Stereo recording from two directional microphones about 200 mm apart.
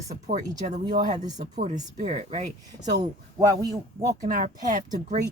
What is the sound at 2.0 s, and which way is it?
Speech, 35° right (ahead or behind).